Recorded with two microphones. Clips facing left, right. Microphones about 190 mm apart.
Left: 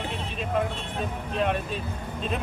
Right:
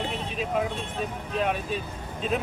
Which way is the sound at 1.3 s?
Centre (ahead or behind).